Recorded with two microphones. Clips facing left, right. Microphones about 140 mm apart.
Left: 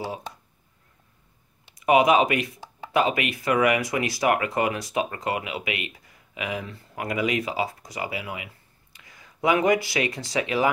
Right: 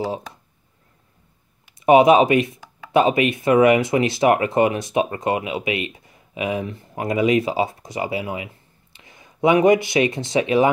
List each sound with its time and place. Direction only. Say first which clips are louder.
1.8 s speech: right 6 dB; 25° right (ahead or behind)